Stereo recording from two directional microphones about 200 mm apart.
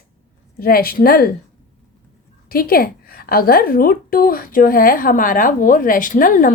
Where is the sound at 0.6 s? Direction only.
50° left (ahead or behind).